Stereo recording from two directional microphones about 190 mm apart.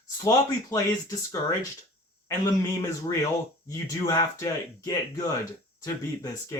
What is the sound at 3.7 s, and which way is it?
Speech, 15° left (ahead or behind).